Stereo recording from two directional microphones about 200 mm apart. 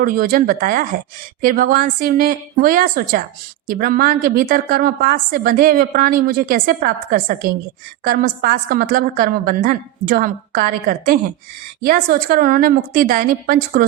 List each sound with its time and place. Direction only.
0.0 s a woman's voice: 45° right (ahead or behind)